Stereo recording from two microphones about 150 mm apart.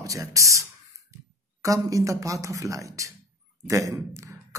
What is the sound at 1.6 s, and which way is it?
Speech, 20° right (ahead or behind).